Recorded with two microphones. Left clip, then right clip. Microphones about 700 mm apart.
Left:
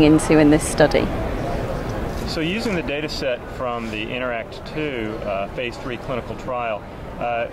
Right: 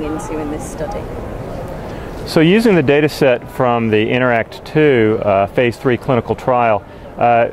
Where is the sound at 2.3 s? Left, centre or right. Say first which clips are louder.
Right 13 dB; right.